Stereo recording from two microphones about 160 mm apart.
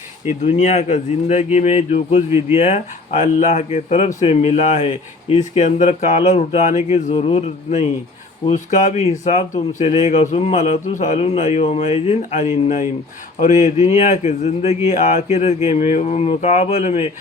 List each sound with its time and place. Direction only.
0.4 s speech: 45° left (ahead or behind)